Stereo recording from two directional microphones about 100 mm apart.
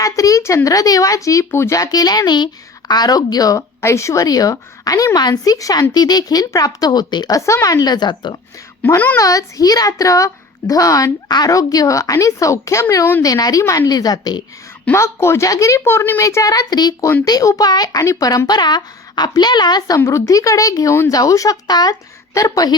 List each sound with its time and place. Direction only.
0.0 s speech: 35° left (ahead or behind)
7.3 s speech: 30° left (ahead or behind); by 8.4 s 45° left (ahead or behind)
9.1 s speech: 35° left (ahead or behind)
14.9 s a woman's voice: 30° left (ahead or behind); by 20.0 s 45° left (ahead or behind)
20.0 s speech: 30° left (ahead or behind)